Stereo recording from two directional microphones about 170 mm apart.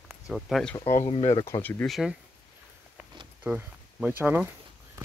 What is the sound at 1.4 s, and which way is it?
Speech, 15° left (ahead or behind).